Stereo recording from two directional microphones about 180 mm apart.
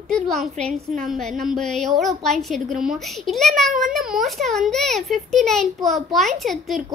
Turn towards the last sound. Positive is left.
turn(degrees=0)  # may be behind; listen again after turning